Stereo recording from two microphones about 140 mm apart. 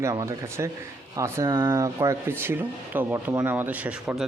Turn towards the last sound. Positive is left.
turn(degrees=-5)  # may be behind; listen again after turning